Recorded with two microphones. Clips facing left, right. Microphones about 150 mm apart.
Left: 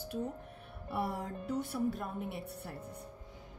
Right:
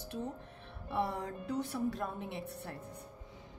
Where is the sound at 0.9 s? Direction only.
5° left (ahead or behind).